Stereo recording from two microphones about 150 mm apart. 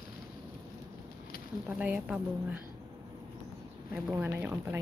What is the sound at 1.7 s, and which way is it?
Speech, 10° right (ahead or behind).